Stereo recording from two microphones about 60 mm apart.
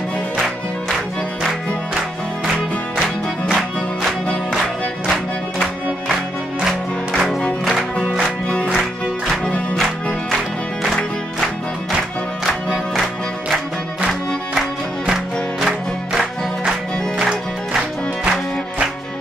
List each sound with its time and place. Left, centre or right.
5.1 s music: centre
12.4 s music: centre
15.6 s music: centre